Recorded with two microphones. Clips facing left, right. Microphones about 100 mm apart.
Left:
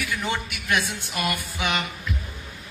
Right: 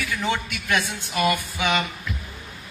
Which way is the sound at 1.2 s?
20° right (ahead or behind).